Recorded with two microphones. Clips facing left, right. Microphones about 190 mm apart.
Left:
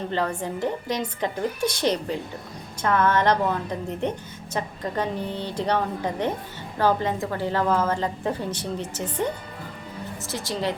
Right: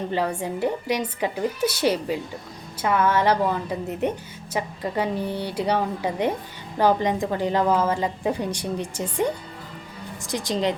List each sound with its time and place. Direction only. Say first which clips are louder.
0.1 s a woman's voice: even; 10° right (ahead or behind)